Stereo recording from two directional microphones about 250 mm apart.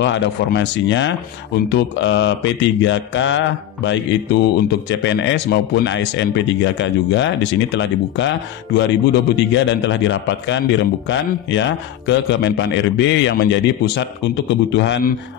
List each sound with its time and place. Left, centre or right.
0.0 s speech: left